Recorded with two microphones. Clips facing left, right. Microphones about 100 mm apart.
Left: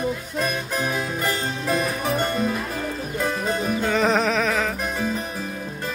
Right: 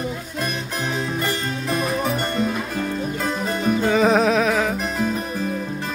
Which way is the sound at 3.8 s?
5° right (ahead or behind).